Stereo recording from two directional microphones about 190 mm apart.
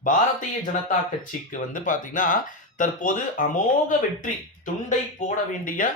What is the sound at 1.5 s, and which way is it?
Speech, 45° left (ahead or behind).